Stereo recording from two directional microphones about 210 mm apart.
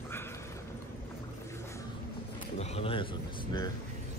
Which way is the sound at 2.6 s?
30° left (ahead or behind).